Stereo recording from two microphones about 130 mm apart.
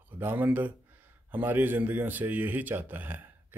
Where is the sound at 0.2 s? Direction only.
15° right (ahead or behind).